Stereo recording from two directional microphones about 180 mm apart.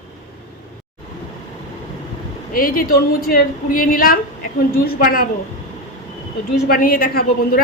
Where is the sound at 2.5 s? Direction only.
55° left (ahead or behind).